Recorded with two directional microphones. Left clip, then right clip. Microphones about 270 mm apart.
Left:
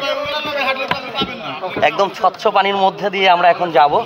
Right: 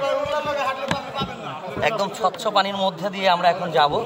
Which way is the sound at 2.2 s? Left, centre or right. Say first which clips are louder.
Left 6 dB; left.